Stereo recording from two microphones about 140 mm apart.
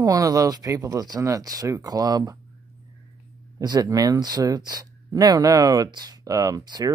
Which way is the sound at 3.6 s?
30° right (ahead or behind).